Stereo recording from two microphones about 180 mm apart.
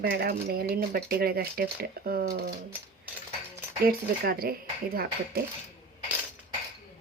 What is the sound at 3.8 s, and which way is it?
Speech, 55° right (ahead or behind).